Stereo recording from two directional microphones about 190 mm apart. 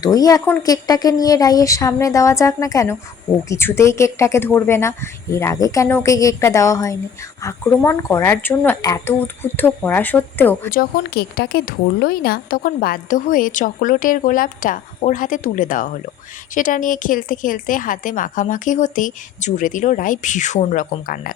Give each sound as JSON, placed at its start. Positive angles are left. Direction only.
{"t": 0.0, "sound": "a woman's voice", "side_deg": 20}
{"t": 10.7, "sound": "speech", "side_deg": 50}